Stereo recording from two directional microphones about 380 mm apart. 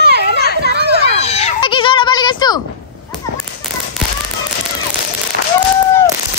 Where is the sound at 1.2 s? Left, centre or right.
Centre.